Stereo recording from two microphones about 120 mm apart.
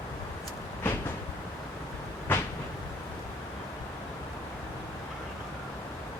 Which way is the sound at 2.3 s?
20° left (ahead or behind).